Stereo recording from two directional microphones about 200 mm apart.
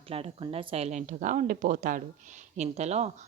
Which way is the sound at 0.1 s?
30° right (ahead or behind).